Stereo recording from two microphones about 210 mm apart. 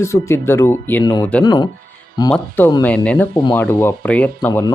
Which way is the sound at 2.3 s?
10° left (ahead or behind).